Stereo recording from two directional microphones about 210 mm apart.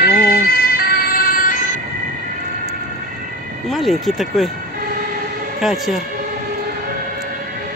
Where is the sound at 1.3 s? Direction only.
40° left (ahead or behind).